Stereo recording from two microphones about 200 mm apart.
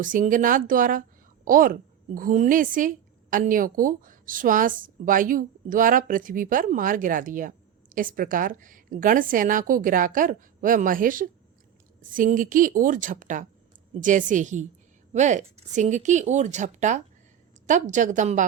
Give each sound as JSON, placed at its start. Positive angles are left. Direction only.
{"t": 0.0, "sound": "a woman's voice", "side_deg": -40}